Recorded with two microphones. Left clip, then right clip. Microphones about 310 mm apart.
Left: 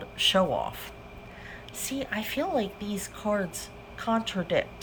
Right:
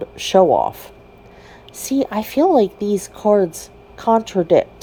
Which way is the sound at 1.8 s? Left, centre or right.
Centre.